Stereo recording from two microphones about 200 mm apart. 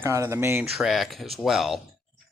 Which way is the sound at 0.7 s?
Centre (ahead or behind).